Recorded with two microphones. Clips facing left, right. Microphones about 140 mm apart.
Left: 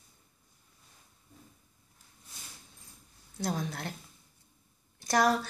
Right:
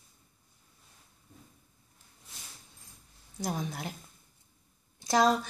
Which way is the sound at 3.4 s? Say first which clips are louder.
Left 1 dB; 5° right (ahead or behind).